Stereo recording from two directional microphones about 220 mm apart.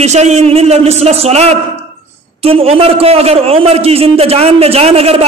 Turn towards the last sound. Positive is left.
turn(degrees=-25)  # may be behind; listen again after turning